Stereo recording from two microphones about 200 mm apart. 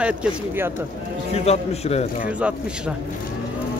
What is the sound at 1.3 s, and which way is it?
Speech, 30° left (ahead or behind).